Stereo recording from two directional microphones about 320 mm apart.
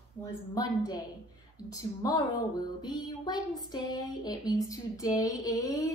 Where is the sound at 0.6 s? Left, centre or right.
Centre.